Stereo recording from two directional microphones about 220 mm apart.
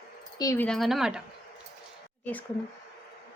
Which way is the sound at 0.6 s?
Centre (ahead or behind).